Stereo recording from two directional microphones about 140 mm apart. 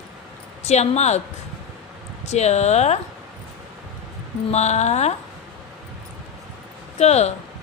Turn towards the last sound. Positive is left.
turn(degrees=50)  # may be behind; listen again after turning